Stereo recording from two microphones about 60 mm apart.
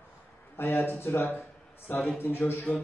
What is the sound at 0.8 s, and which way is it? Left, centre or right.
A man's voice, left.